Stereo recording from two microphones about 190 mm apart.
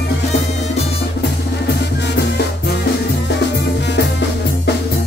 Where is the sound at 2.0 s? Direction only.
65° left (ahead or behind).